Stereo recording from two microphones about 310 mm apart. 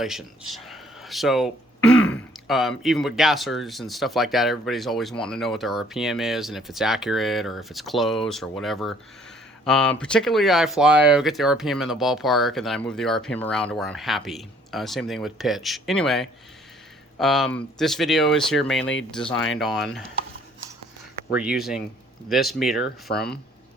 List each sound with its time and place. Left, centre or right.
0.0 s speech: centre
21.3 s speech: centre
23.0 s speech: left